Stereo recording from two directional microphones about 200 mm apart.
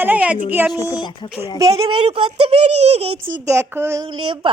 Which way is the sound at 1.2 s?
20° left (ahead or behind).